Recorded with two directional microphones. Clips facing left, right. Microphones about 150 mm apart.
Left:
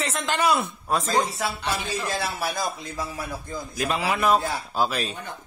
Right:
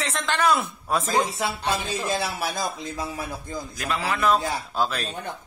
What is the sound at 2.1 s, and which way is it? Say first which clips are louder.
Speech: right 2 dB; 20° right (ahead or behind).